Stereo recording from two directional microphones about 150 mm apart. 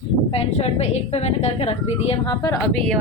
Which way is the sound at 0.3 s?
45° left (ahead or behind).